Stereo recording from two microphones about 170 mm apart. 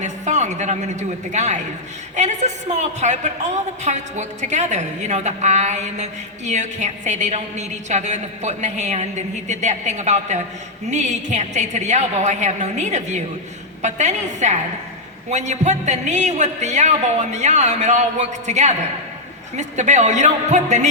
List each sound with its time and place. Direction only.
0.0 s a woman's voice: 45° right (ahead or behind)